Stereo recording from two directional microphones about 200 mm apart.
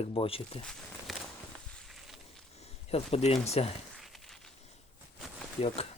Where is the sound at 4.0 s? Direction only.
Centre (ahead or behind).